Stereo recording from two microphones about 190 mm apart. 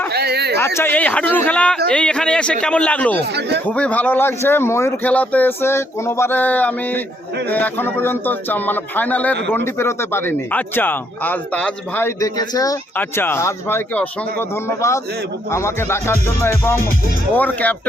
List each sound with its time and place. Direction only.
0.1 s a sound: 60° right (ahead or behind)
0.6 s a man's voice: 10° left (ahead or behind)
3.2 s speech: 60° right (ahead or behind)
3.7 s a man's voice: 5° left (ahead or behind)